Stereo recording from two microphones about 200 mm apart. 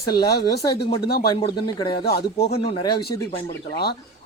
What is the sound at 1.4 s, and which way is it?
Speech, 25° left (ahead or behind).